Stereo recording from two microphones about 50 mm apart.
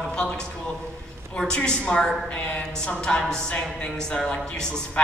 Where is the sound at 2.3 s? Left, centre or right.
Left.